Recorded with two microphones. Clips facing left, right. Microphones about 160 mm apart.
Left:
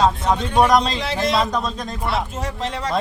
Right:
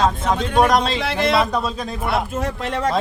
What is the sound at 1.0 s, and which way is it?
Speech, 60° right (ahead or behind).